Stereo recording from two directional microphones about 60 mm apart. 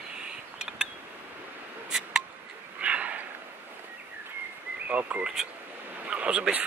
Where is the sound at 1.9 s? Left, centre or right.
Centre.